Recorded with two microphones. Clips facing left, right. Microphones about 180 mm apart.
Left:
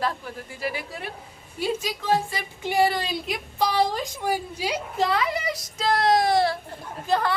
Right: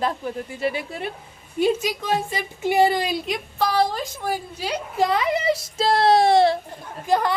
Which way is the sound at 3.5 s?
15° left (ahead or behind).